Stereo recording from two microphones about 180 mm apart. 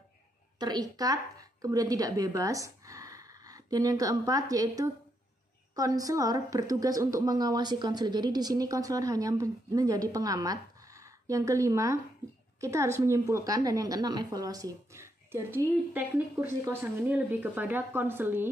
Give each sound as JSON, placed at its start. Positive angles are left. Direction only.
{"t": 0.6, "sound": "a woman's voice", "side_deg": -20}